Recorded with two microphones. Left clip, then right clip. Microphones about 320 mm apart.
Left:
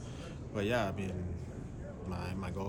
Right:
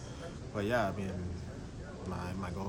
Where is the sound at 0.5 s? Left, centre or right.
Centre.